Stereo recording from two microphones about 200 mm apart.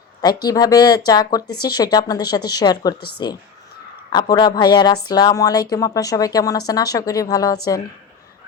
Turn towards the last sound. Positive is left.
turn(degrees=20)  # may be behind; listen again after turning